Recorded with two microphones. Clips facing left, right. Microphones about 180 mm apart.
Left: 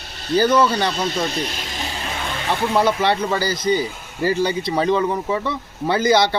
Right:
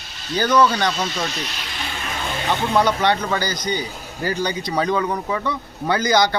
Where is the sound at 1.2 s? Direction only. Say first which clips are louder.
Left 4 dB; 50° left (ahead or behind).